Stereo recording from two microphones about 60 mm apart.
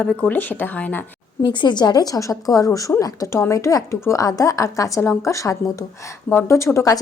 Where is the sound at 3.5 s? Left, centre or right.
Left.